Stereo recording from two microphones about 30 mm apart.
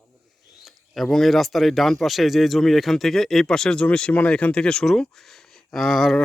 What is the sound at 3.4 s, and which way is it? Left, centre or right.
Speech, centre.